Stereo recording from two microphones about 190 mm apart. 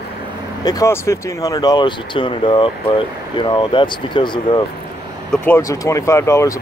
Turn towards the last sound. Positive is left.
turn(degrees=15)  # may be behind; listen again after turning